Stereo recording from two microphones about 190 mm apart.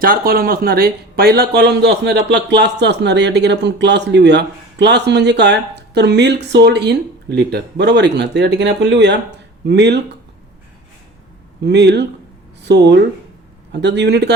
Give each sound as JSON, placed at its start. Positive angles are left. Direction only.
{"t": 0.0, "sound": "speech", "side_deg": -50}
{"t": 11.6, "sound": "speech", "side_deg": -65}